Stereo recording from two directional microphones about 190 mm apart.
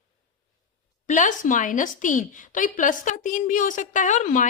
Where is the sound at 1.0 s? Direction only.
40° left (ahead or behind).